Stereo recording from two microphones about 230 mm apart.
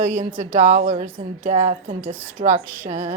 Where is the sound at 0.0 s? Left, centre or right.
Right.